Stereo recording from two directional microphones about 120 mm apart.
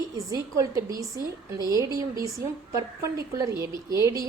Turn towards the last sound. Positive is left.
turn(degrees=-25)  # may be behind; listen again after turning